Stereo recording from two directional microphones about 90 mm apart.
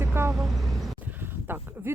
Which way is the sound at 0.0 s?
30° right (ahead or behind).